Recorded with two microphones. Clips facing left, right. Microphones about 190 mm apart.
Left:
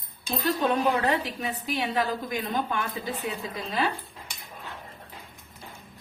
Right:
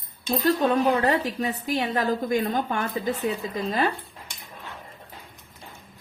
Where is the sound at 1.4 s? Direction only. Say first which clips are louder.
Right 4 dB; 45° right (ahead or behind).